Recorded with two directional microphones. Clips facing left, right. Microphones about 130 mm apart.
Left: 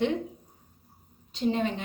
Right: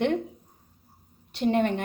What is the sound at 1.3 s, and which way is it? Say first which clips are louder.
Speech: right 4 dB; 65° right (ahead or behind).